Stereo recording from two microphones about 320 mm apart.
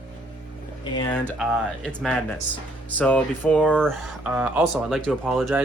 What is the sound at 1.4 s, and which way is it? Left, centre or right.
Speech, centre.